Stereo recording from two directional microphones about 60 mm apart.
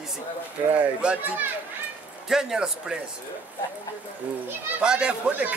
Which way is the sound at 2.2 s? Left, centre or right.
Centre.